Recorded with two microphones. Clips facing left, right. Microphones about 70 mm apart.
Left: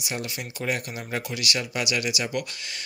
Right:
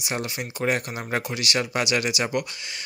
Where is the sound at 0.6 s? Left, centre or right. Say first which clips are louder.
Right 4 dB; right.